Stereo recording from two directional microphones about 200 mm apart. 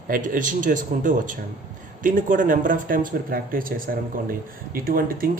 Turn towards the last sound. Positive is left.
turn(degrees=-45)  # may be behind; listen again after turning